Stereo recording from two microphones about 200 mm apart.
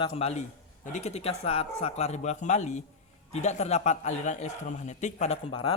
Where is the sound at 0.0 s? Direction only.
30° left (ahead or behind).